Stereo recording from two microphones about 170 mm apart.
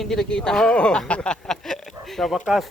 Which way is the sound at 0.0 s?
Centre (ahead or behind).